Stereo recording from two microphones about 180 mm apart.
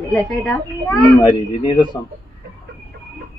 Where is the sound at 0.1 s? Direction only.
5° left (ahead or behind).